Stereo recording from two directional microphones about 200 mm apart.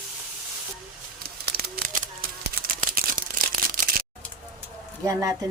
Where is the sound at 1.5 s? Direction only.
50° right (ahead or behind).